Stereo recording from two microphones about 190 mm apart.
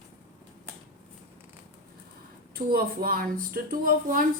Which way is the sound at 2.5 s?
50° right (ahead or behind).